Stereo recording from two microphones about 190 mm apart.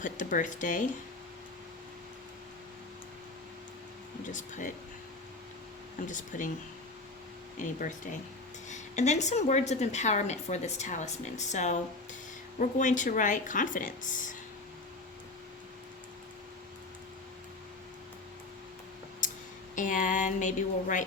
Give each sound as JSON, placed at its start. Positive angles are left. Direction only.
{"t": 0.0, "sound": "speech", "side_deg": 45}
{"t": 4.3, "sound": "a woman's voice", "side_deg": 40}
{"t": 6.1, "sound": "speech", "side_deg": 45}
{"t": 7.6, "sound": "a woman's voice", "side_deg": 45}
{"t": 19.7, "sound": "speech", "side_deg": 45}